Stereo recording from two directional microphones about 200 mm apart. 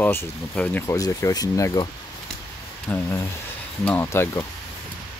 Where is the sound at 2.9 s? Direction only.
5° left (ahead or behind).